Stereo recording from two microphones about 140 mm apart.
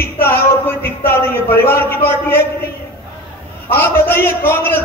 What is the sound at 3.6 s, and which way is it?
A man's voice, 15° left (ahead or behind).